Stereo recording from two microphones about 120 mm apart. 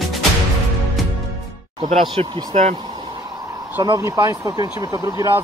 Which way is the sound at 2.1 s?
55° right (ahead or behind).